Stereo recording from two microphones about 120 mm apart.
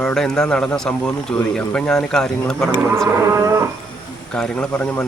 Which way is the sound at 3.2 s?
25° right (ahead or behind).